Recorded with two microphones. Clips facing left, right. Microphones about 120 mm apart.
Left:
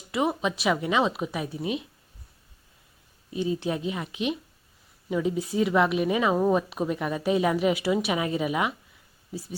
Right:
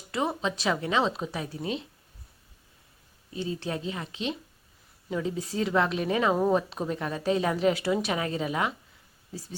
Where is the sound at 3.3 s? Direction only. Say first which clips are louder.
Left 5 dB; 20° left (ahead or behind).